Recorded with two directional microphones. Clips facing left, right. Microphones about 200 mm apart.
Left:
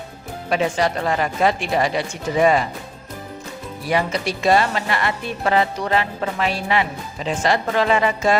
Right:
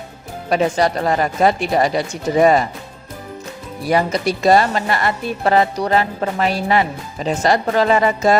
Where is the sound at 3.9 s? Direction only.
40° right (ahead or behind).